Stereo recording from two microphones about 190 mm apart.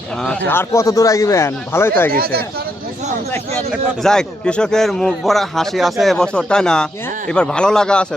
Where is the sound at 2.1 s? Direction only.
55° right (ahead or behind).